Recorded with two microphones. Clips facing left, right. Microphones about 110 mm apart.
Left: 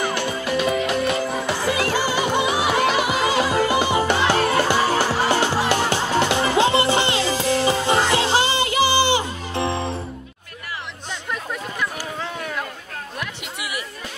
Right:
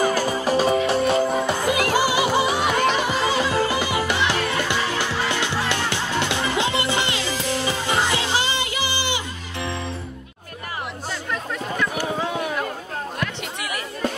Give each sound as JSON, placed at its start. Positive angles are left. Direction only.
{"t": 0.0, "sound": "music", "side_deg": -40}
{"t": 2.0, "sound": "music", "side_deg": -10}
{"t": 12.2, "sound": "a sound", "side_deg": -15}